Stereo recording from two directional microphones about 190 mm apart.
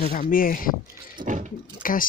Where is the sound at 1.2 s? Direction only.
40° right (ahead or behind).